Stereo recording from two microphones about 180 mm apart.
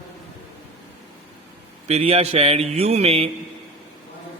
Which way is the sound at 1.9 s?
35° right (ahead or behind).